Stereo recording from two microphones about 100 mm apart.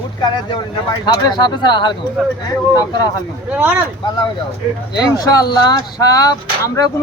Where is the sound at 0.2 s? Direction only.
50° left (ahead or behind).